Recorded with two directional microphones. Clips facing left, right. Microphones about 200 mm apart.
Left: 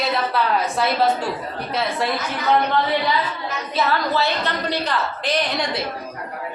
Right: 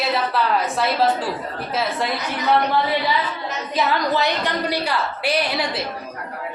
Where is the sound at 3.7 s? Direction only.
15° right (ahead or behind).